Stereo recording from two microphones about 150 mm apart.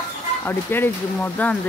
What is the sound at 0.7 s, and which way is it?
Speech, 15° left (ahead or behind).